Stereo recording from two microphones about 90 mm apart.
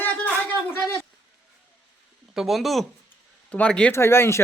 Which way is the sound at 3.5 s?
10° left (ahead or behind).